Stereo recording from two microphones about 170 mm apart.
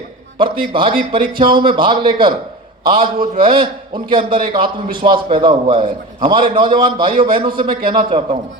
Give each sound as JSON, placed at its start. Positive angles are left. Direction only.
{"t": 0.3, "sound": "a man's voice", "side_deg": -30}